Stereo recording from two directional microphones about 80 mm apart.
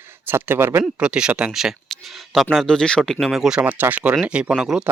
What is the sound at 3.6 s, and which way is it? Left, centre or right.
Speech, centre.